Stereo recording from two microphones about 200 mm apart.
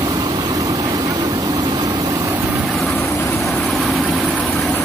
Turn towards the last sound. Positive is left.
turn(degrees=0)  # may be behind; listen again after turning